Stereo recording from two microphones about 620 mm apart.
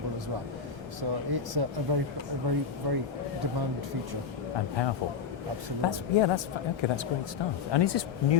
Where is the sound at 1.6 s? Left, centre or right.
Right.